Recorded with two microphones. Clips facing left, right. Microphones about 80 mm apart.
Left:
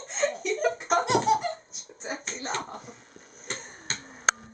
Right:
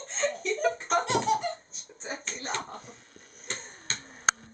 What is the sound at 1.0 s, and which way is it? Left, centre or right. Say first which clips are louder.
Laughter: left 5 dB; centre.